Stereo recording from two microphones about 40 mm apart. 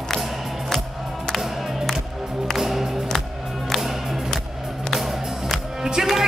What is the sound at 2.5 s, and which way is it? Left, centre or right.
Music, centre.